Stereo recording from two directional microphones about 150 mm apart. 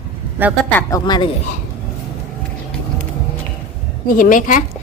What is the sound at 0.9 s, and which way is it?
Speech, 30° left (ahead or behind).